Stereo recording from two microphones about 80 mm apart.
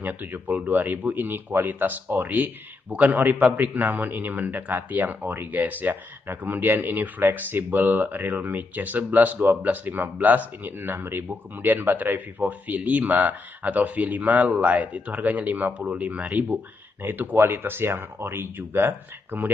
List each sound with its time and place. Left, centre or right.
0.0 s speech: right